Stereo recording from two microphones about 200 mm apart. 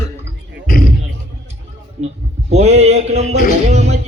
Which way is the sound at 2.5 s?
30° right (ahead or behind).